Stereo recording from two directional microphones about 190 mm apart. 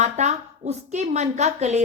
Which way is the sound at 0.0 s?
35° right (ahead or behind).